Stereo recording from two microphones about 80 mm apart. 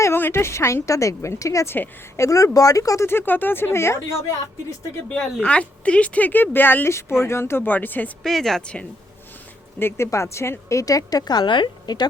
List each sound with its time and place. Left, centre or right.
0.0 s a woman's voice: left
1.7 s speech: left
3.1 s speech: left
5.0 s speech: centre
8.2 s speech: centre
9.7 s a woman's voice: left